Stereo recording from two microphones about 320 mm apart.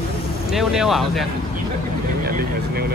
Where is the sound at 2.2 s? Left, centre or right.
Right.